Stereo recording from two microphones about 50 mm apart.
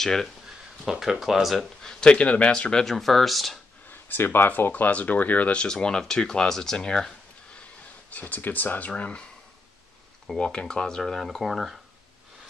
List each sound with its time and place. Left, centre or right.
0.0 s speech: centre
0.8 s speech: centre
1.6 s speech: centre
2.8 s speech: centre
3.9 s speech: left
5.5 s speech: centre
8.1 s speech: left
10.2 s speech: centre